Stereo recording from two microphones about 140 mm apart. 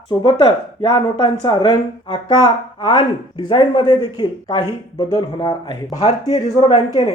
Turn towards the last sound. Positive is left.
turn(degrees=55)  # may be behind; listen again after turning